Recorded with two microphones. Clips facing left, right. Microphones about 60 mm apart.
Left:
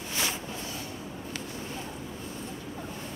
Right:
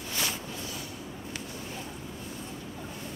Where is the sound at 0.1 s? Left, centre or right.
Left.